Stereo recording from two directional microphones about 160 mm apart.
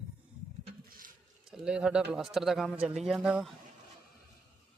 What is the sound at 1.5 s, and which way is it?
A man's voice, 5° right (ahead or behind).